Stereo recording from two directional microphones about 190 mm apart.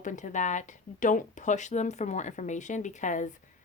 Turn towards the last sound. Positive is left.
turn(degrees=40)  # may be behind; listen again after turning